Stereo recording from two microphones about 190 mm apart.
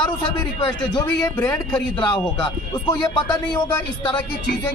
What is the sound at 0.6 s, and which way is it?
Speech, 25° left (ahead or behind).